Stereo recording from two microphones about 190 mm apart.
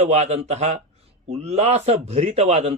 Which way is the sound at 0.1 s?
35° right (ahead or behind).